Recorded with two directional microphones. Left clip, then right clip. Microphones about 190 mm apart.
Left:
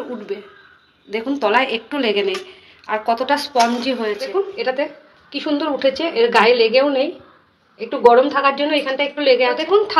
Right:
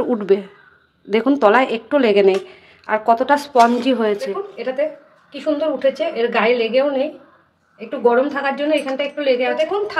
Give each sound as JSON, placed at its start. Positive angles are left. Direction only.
{"t": 0.3, "sound": "a woman's voice", "side_deg": -55}
{"t": 4.6, "sound": "a woman's voice", "side_deg": 30}
{"t": 8.1, "sound": "a woman's voice", "side_deg": 30}